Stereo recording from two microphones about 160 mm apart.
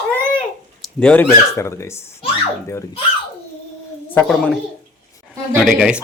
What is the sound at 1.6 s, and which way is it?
Speech, 20° left (ahead or behind).